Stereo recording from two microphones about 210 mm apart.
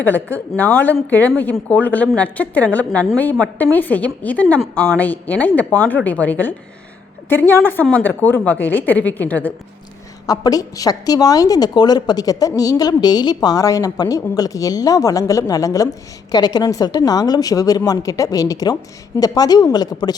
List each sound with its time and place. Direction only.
0.0 s a woman's voice: 10° left (ahead or behind)